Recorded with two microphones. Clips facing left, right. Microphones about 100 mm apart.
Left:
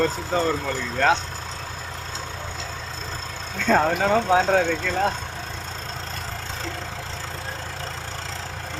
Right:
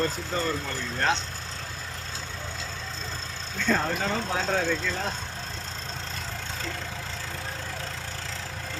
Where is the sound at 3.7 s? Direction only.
70° left (ahead or behind).